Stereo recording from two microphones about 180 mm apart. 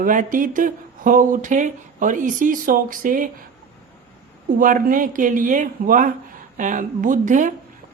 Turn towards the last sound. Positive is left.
turn(degrees=-45)  # may be behind; listen again after turning